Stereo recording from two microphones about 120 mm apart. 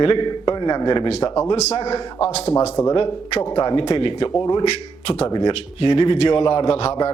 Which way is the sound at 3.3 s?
35° left (ahead or behind).